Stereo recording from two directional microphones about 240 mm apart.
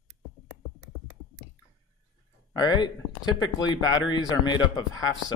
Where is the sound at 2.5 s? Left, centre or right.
Centre.